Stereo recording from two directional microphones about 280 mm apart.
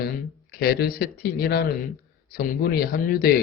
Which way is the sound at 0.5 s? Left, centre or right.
Left.